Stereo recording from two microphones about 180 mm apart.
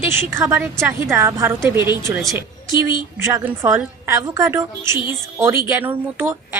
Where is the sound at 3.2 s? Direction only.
15° right (ahead or behind).